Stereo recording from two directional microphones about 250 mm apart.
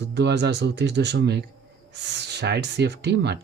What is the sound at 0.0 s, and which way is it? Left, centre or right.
A man's voice, right.